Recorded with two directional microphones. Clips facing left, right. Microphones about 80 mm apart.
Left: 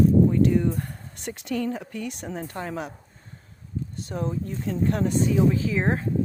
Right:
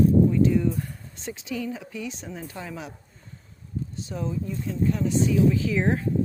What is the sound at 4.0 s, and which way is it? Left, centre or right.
Speech, left.